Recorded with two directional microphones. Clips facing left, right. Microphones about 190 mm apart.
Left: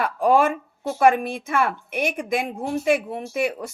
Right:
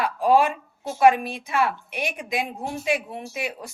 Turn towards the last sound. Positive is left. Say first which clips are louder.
# left 7 dB
turn(degrees=55)  # may be behind; listen again after turning